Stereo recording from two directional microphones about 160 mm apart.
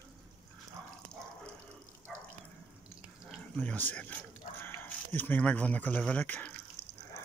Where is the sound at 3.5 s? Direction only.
10° left (ahead or behind).